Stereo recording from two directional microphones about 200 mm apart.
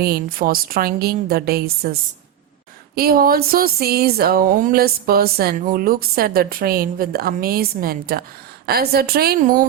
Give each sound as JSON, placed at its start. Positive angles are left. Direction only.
{"t": 0.0, "sound": "speech", "side_deg": -50}